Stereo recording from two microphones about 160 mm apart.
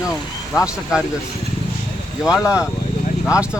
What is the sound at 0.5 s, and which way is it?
Speech, 20° left (ahead or behind).